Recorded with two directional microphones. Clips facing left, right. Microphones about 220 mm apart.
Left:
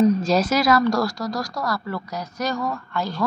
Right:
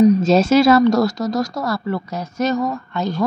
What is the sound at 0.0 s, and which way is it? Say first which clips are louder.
Speech: right 5 dB; 25° right (ahead or behind).